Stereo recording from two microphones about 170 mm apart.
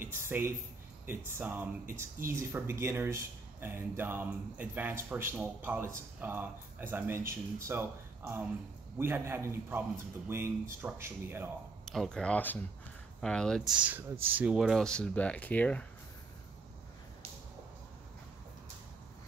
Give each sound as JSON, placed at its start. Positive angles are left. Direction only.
{"t": 0.0, "sound": "speech", "side_deg": -15}
{"t": 11.8, "sound": "speech", "side_deg": 0}